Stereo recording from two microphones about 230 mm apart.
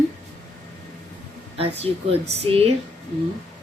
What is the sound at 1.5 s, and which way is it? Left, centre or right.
A woman's voice, right.